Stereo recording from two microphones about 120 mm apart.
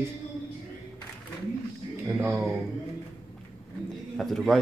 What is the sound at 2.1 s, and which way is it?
Speech, 15° right (ahead or behind).